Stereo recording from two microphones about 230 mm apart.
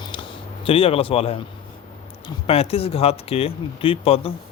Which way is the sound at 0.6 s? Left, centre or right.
Left.